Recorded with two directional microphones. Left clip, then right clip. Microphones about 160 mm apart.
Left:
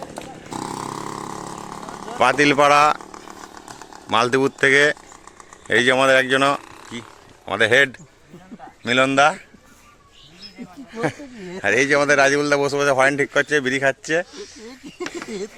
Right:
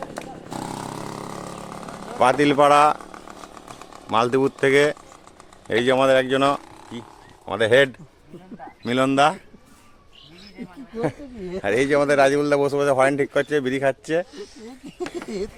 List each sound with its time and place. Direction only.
0.0 s a sound: 20° left (ahead or behind)
0.5 s a sound: 35° right (ahead or behind)
1.1 s chainsaw: 70° right (ahead or behind)
2.1 s speech: 5° left (ahead or behind)
4.1 s speech: 5° left (ahead or behind)
10.9 s speech: centre (ahead or behind)